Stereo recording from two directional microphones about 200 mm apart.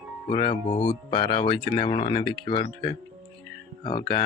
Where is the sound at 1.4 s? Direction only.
25° left (ahead or behind).